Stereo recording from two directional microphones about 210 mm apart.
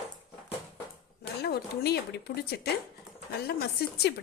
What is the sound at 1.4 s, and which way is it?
A woman's voice, 50° left (ahead or behind).